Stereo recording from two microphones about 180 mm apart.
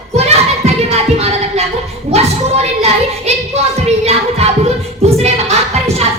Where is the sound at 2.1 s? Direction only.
35° right (ahead or behind).